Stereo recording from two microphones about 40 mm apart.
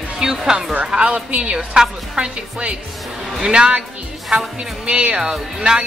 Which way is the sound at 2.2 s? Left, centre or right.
Right.